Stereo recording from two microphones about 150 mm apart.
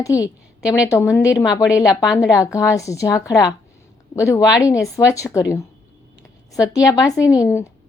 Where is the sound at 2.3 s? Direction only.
20° left (ahead or behind).